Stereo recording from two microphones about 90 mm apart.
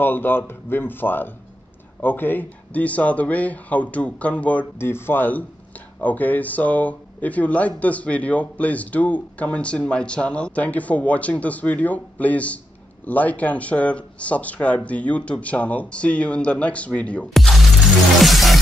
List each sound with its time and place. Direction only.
0.0 s speech: 25° left (ahead or behind)
17.4 s shatter: centre (ahead or behind)
18.2 s music: centre (ahead or behind)